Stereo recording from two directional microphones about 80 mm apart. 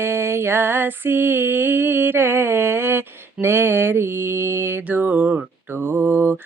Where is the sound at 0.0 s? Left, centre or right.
Right.